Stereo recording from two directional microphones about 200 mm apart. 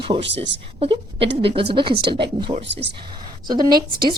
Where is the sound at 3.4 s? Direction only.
20° right (ahead or behind).